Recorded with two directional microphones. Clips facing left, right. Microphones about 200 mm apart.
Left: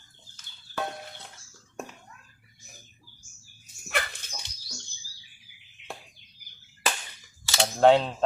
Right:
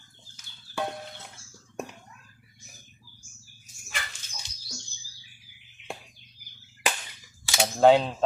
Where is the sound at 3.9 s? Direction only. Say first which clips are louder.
Left 8 dB; 60° left (ahead or behind).